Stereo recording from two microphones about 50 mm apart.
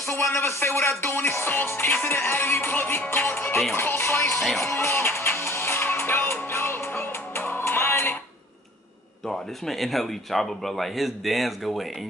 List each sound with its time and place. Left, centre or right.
0.0 s speech: left
3.1 s music: left
3.7 s speech: left
4.6 s music: left
9.2 s speech: centre